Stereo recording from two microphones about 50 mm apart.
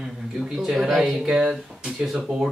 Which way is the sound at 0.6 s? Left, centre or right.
Centre.